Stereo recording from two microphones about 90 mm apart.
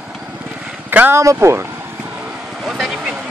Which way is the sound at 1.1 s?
35° right (ahead or behind).